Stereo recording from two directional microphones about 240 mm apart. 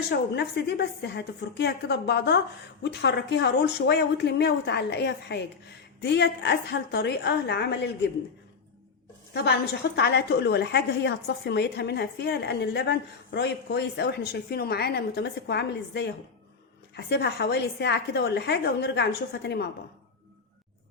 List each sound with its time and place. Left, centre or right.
0.1 s a woman's voice: left
9.3 s a woman's voice: left